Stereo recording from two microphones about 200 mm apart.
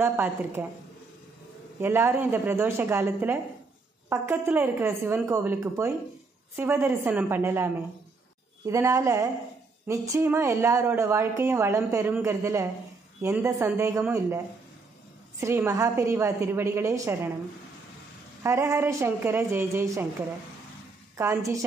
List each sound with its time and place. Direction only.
0.0 s speech: 10° right (ahead or behind)
1.8 s speech: 10° right (ahead or behind)
15.4 s speech: 15° right (ahead or behind)
18.4 s speech: 15° right (ahead or behind)
21.2 s speech: 15° right (ahead or behind)